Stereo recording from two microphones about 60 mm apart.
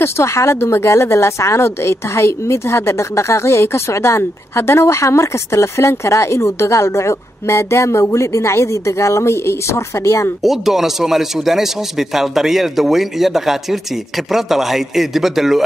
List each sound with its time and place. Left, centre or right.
0.0 s a woman's voice: left
10.4 s a man's voice: centre